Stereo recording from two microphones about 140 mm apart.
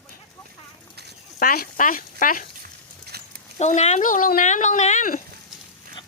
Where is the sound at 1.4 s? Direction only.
80° left.